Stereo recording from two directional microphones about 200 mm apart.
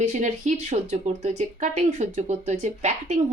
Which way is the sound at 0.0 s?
35° right (ahead or behind).